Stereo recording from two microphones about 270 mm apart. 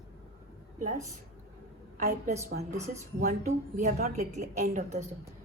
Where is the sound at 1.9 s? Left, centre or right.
Right.